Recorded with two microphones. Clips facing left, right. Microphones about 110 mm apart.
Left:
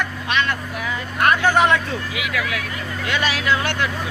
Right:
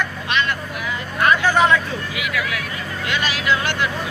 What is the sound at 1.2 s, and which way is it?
Speech, 55° left (ahead or behind).